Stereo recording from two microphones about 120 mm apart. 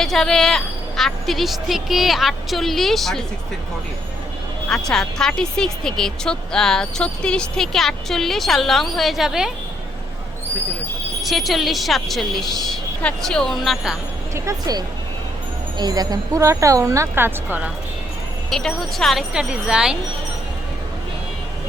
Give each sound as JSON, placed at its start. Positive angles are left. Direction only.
{"t": 0.0, "sound": "speech", "side_deg": 5}
{"t": 4.7, "sound": "speech", "side_deg": 5}
{"t": 11.2, "sound": "speech", "side_deg": 0}
{"t": 14.3, "sound": "a woman's voice", "side_deg": -30}
{"t": 18.5, "sound": "speech", "side_deg": 0}